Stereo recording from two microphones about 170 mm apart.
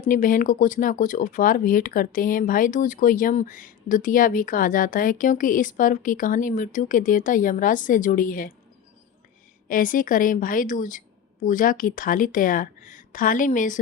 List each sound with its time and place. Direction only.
0.1 s speech: 55° left (ahead or behind)
9.6 s speech: 55° left (ahead or behind)